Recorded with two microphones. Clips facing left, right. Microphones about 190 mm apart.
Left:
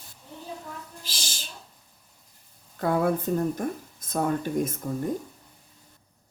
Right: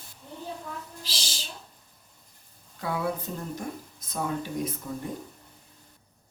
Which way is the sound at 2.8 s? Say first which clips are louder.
Left 6 dB; 50° left (ahead or behind).